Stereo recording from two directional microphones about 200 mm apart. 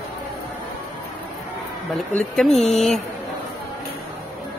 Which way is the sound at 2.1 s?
Centre (ahead or behind).